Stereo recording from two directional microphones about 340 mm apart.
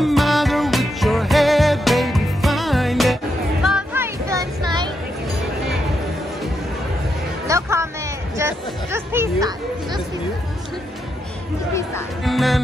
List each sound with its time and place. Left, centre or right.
0.0 s music: centre
7.4 s music: centre
8.4 s chatter: centre
11.7 s music: centre